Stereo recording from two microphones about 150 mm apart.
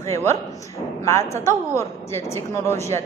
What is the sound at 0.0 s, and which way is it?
A woman's voice, 20° left (ahead or behind).